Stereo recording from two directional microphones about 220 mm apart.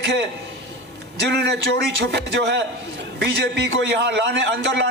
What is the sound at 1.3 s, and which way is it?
A man's voice, 50° right (ahead or behind).